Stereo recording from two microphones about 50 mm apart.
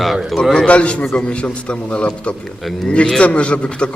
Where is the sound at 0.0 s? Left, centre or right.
Centre.